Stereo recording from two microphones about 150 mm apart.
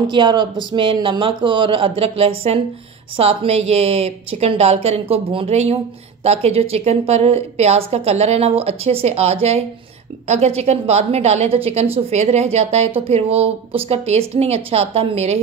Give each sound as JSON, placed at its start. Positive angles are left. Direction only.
{"t": 0.0, "sound": "a woman's voice", "side_deg": -30}